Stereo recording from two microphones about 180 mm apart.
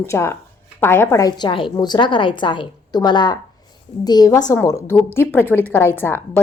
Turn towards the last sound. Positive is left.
turn(degrees=10)  # may be behind; listen again after turning